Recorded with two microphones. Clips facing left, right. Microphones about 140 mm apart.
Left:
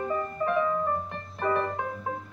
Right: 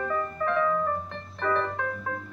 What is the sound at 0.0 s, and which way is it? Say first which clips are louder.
Music: even; 20° left (ahead or behind).